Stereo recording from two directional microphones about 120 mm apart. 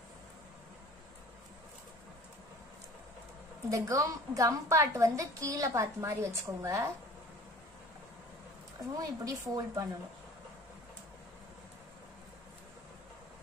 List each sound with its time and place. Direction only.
3.7 s a woman's voice: 30° right (ahead or behind)
8.9 s a woman's voice: 30° right (ahead or behind)